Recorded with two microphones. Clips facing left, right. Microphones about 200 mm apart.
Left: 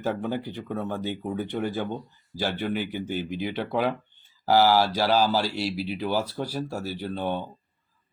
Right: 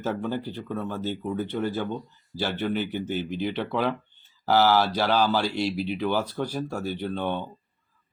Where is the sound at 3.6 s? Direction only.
45° left (ahead or behind).